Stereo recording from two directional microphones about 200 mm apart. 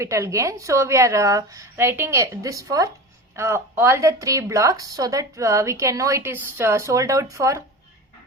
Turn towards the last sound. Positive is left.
turn(degrees=-15)  # may be behind; listen again after turning